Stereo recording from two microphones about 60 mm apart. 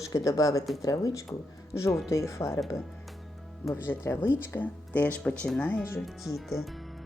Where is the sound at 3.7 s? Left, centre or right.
Left.